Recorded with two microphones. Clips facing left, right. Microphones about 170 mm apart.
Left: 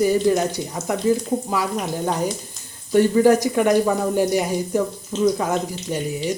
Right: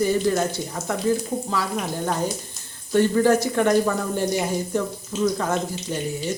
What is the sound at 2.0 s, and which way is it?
Speech, 15° left (ahead or behind).